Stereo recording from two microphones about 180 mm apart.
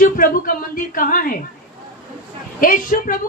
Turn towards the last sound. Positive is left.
turn(degrees=50)  # may be behind; listen again after turning